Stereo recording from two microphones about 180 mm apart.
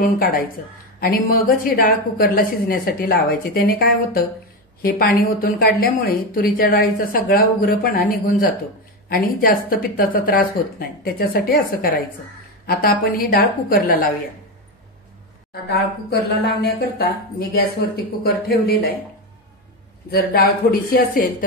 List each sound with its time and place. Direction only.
1.0 s a woman's voice: 55° left (ahead or behind)
15.7 s a woman's voice: 60° left (ahead or behind)
20.1 s a woman's voice: 60° left (ahead or behind)